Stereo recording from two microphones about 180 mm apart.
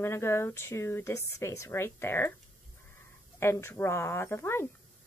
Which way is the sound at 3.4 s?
15° left (ahead or behind).